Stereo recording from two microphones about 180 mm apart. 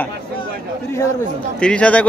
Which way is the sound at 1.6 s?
5° left (ahead or behind).